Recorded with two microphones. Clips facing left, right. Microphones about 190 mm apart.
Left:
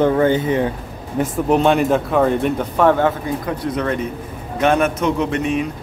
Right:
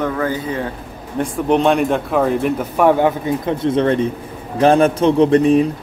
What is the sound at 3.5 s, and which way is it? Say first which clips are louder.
A man's voice: right 7 dB; 25° right (ahead or behind).